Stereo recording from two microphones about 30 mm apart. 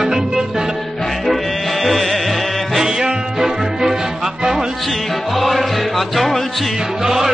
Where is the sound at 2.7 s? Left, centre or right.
Centre.